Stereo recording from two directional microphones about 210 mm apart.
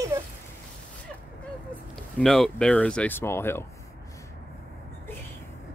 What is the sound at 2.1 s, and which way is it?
Speech, centre (ahead or behind).